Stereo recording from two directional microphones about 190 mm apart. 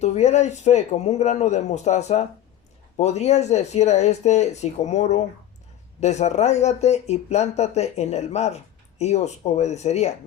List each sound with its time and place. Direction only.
0.0 s speech: 35° left (ahead or behind)